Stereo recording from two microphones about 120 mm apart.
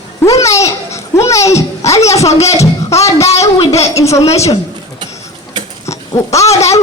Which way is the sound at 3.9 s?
25° left (ahead or behind).